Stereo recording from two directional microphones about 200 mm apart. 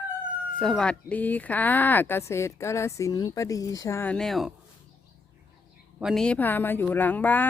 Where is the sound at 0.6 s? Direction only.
5° left (ahead or behind).